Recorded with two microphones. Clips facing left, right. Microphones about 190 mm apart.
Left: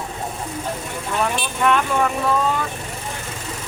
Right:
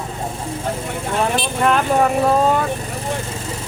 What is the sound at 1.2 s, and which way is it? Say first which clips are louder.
Speech: right 3 dB; 35° right (ahead or behind).